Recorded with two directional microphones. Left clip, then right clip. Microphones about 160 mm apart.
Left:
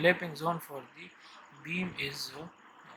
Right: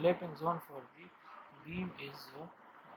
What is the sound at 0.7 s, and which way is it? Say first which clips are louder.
Speech: left 6 dB; 60° left (ahead or behind).